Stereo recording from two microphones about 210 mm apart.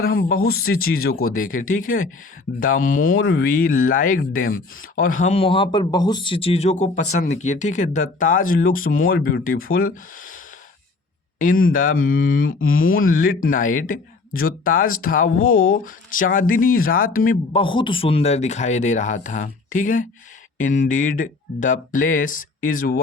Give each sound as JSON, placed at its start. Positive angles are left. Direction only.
{"t": 0.4, "sound": "speech", "side_deg": 45}
{"t": 3.1, "sound": "speech", "side_deg": 60}
{"t": 11.3, "sound": "speech", "side_deg": 40}
{"t": 17.5, "sound": "speech", "side_deg": 25}